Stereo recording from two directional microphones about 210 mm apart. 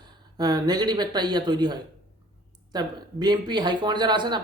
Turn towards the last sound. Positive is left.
turn(degrees=-20)  # may be behind; listen again after turning